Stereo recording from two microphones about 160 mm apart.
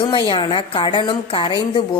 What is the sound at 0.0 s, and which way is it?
A woman's voice, 30° left (ahead or behind).